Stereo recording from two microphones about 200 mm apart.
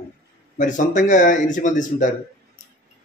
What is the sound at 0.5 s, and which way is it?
A man's voice, 40° left (ahead or behind).